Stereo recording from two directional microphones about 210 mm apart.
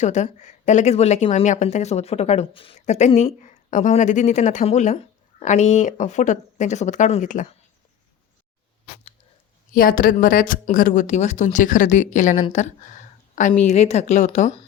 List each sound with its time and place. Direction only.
0.0 s speech: 35° left (ahead or behind)
9.7 s speech: 40° left (ahead or behind)